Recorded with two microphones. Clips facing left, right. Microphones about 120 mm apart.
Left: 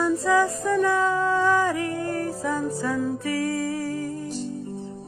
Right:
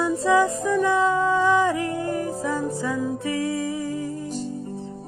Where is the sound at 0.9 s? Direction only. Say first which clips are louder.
Right 2 dB; 20° right (ahead or behind).